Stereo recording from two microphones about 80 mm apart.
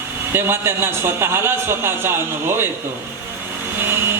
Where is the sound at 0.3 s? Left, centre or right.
Right.